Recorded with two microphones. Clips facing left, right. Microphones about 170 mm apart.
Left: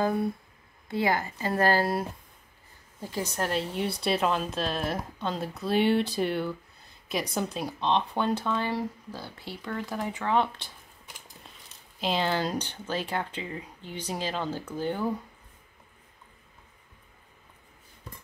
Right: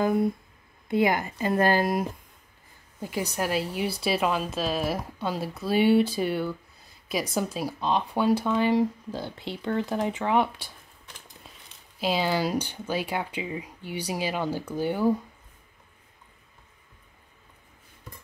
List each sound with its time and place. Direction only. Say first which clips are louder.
0.8 s speech: right 4 dB; 20° right (ahead or behind)
12.0 s speech: right 2 dB; 10° right (ahead or behind)